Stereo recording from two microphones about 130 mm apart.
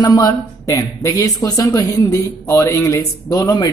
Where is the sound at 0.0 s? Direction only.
30° left (ahead or behind).